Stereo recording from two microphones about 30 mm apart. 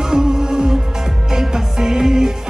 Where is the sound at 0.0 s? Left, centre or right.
Right.